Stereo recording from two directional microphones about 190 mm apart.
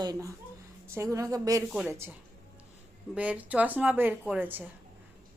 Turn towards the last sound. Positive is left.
turn(degrees=-10)  # may be behind; listen again after turning